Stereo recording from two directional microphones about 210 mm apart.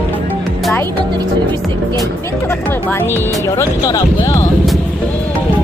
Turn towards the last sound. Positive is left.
turn(degrees=15)  # may be behind; listen again after turning